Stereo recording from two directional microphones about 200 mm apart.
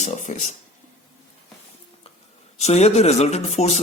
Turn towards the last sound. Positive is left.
turn(degrees=35)  # may be behind; listen again after turning